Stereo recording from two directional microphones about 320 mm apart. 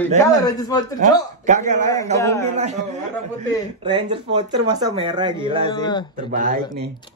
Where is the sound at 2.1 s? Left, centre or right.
Centre.